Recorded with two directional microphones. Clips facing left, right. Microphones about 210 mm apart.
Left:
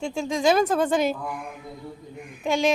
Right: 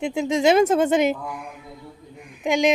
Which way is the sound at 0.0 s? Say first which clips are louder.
Right 3 dB; 20° right (ahead or behind).